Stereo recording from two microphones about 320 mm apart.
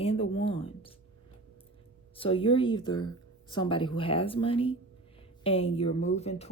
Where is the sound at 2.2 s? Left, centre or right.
Centre.